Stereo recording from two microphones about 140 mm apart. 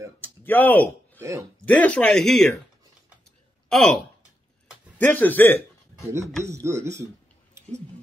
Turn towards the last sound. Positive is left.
turn(degrees=-20)  # may be behind; listen again after turning